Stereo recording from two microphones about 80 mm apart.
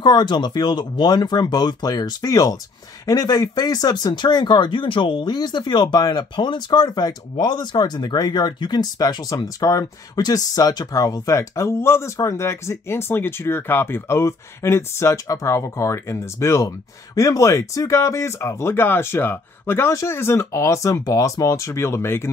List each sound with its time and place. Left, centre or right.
0.0 s speech: left
16.6 s speech: left